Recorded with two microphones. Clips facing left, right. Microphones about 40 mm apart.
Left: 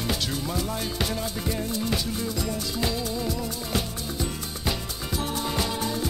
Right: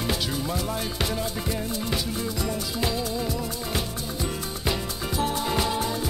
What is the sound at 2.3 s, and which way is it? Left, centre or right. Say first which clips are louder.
Music: right 1 dB; centre.